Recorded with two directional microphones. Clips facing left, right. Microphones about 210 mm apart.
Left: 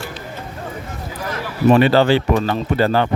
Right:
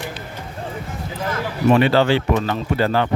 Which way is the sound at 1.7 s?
40° left (ahead or behind).